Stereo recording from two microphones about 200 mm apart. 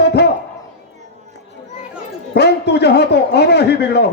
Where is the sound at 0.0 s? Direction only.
55° left (ahead or behind).